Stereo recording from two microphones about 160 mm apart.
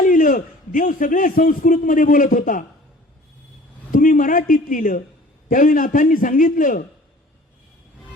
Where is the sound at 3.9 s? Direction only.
55° left (ahead or behind).